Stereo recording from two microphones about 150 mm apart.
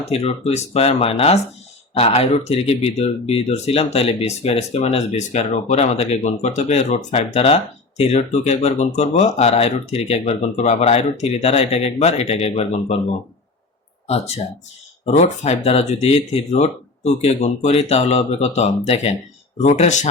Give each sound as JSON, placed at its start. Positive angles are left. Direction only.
{"t": 0.0, "sound": "speech", "side_deg": 45}
{"t": 15.0, "sound": "speech", "side_deg": 45}